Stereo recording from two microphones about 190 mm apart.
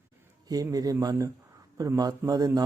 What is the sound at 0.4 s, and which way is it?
Speech, 20° right (ahead or behind).